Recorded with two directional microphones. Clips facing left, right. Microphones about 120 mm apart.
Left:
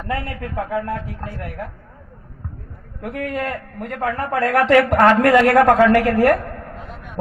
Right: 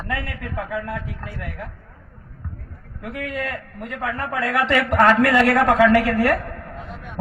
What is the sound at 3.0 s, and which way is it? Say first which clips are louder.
A man's voice: left 3 dB; 50° left (ahead or behind).